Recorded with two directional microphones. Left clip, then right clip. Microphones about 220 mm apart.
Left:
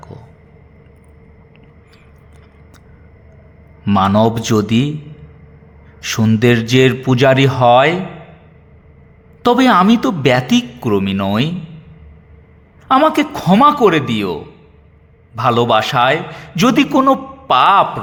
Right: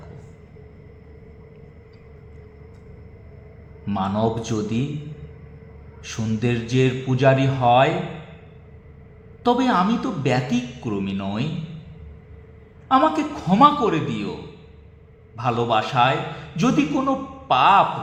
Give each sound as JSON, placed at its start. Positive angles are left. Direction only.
{"t": 3.8, "sound": "a man's voice", "side_deg": 55}
{"t": 6.0, "sound": "a man's voice", "side_deg": 55}
{"t": 9.4, "sound": "a man's voice", "side_deg": 55}
{"t": 12.9, "sound": "a man's voice", "side_deg": 55}
{"t": 15.4, "sound": "a man's voice", "side_deg": 55}